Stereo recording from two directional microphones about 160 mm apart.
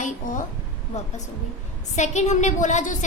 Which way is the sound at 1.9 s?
45° left (ahead or behind).